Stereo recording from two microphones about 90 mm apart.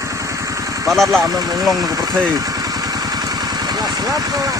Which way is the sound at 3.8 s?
45° right (ahead or behind).